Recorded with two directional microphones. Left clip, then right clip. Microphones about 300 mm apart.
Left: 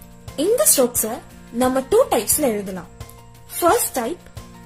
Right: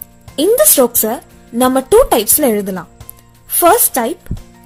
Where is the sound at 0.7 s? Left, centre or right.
Right.